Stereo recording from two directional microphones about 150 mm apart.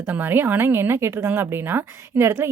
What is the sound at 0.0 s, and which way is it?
Speech, 15° right (ahead or behind).